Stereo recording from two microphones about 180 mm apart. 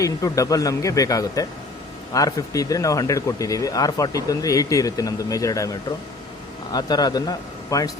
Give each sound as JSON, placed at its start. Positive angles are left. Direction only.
{"t": 0.0, "sound": "speech", "side_deg": 20}
{"t": 6.7, "sound": "speech", "side_deg": 20}